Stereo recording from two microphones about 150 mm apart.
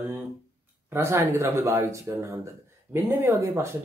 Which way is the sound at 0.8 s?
15° right (ahead or behind).